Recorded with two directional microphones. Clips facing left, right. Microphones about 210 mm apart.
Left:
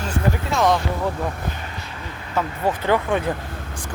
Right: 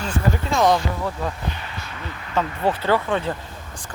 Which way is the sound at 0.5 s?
Centre (ahead or behind).